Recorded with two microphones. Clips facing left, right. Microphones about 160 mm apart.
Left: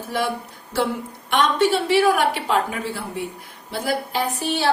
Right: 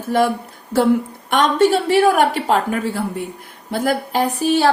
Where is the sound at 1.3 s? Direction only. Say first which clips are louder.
Right 4 dB; 45° right (ahead or behind).